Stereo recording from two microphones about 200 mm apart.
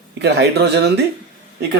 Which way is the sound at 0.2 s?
55° right (ahead or behind).